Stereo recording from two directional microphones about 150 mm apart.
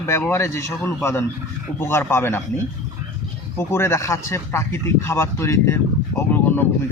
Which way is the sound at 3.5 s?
15° left (ahead or behind).